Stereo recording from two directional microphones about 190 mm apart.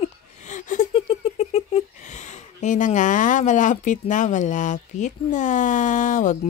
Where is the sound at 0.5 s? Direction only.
40° left (ahead or behind).